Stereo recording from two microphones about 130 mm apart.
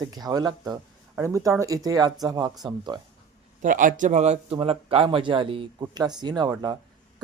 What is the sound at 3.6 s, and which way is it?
Speech, 90° right.